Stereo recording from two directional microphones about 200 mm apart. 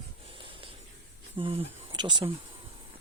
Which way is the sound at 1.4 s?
30° right (ahead or behind).